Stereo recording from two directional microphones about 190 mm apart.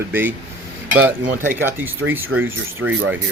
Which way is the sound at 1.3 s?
45° right (ahead or behind).